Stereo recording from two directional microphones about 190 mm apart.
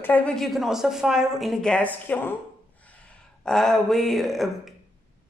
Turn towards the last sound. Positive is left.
turn(degrees=0)  # may be behind; listen again after turning